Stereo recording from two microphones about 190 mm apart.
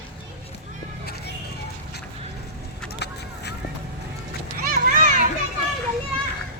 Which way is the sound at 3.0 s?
60° left (ahead or behind).